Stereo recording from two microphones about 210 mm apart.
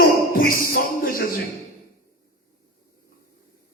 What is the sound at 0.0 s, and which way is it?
Music, 45° left (ahead or behind).